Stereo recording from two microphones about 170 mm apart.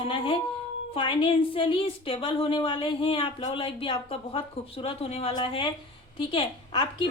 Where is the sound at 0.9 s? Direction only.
30° left (ahead or behind).